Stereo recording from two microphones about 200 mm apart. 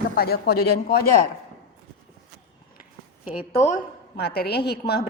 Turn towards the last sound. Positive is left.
turn(degrees=55)  # may be behind; listen again after turning